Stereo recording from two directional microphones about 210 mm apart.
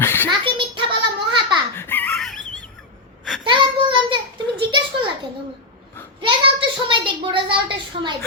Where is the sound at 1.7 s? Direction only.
10° left (ahead or behind).